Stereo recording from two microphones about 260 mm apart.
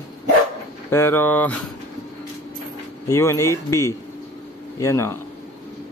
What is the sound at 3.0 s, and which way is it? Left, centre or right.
Speech, centre.